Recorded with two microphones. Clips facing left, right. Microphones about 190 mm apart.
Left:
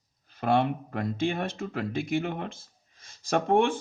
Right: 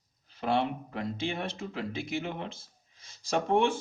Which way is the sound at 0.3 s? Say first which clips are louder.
Left 4 dB; 55° left (ahead or behind).